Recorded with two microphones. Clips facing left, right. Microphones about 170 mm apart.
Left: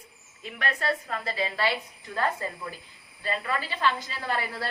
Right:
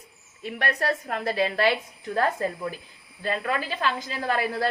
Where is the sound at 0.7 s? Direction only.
40° right (ahead or behind); by 1.7 s 60° right (ahead or behind).